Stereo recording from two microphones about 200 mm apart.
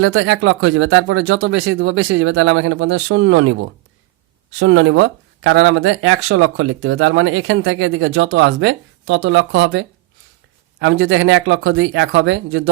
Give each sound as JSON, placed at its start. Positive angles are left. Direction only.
{"t": 0.0, "sound": "speech", "side_deg": -85}
{"t": 4.6, "sound": "speech", "side_deg": -70}
{"t": 10.8, "sound": "speech", "side_deg": -90}